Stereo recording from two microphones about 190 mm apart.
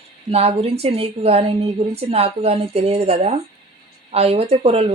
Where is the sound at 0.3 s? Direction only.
30° right (ahead or behind).